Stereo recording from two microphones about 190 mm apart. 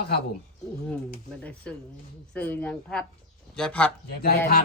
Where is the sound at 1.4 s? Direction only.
5° left (ahead or behind).